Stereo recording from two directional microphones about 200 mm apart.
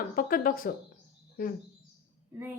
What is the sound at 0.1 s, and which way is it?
Speech, 45° left (ahead or behind).